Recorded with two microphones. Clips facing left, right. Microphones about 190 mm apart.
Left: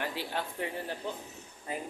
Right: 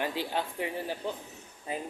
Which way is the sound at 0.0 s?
20° right (ahead or behind).